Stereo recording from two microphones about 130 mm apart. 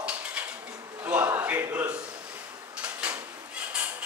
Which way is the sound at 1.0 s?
10° right (ahead or behind).